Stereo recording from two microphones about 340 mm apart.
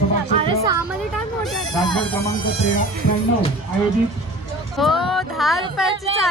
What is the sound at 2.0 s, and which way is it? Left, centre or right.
Music, centre.